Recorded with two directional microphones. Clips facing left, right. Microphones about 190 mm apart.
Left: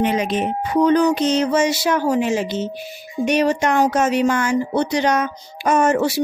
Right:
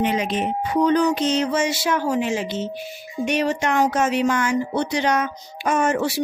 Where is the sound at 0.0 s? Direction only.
45° left (ahead or behind).